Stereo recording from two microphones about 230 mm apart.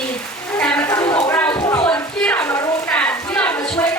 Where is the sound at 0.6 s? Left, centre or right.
Centre.